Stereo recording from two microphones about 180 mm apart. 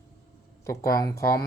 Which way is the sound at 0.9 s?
20° left (ahead or behind).